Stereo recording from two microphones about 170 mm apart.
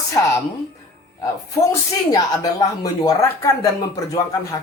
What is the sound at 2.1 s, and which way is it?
Speech, 20° left (ahead or behind).